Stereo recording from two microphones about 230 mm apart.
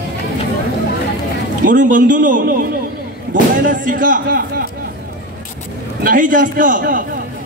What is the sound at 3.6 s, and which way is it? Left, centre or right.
Speech, right.